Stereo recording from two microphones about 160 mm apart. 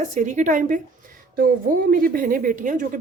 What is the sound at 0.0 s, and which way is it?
A woman's voice, 50° right (ahead or behind).